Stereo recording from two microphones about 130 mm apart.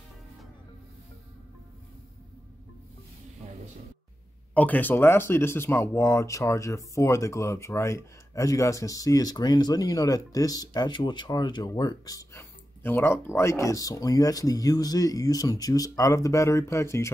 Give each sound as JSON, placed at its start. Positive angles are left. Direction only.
{"t": 4.6, "sound": "speech", "side_deg": 15}